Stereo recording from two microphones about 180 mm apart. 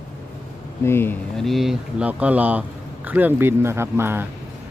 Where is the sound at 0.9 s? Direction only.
15° left (ahead or behind).